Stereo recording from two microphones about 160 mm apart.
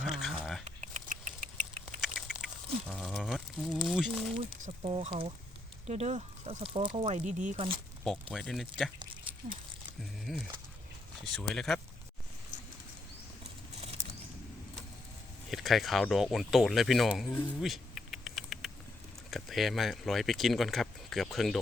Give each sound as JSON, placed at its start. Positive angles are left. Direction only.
{"t": 0.0, "sound": "a sound", "side_deg": 0}
{"t": 0.6, "sound": "rodents", "side_deg": -50}
{"t": 2.0, "sound": "duck", "side_deg": 0}
{"t": 4.8, "sound": "speech", "side_deg": -35}
{"t": 8.0, "sound": "speech", "side_deg": 0}
{"t": 10.0, "sound": "a sound", "side_deg": 0}
{"t": 11.3, "sound": "speech", "side_deg": 5}
{"t": 15.4, "sound": "speech", "side_deg": 0}
{"t": 17.6, "sound": "insect", "side_deg": 0}
{"t": 19.3, "sound": "speech", "side_deg": 0}